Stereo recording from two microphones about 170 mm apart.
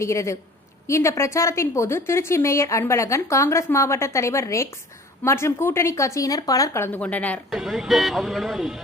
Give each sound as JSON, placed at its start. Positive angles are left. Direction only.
{"t": 0.0, "sound": "a woman's voice", "side_deg": 15}
{"t": 7.6, "sound": "speech", "side_deg": 0}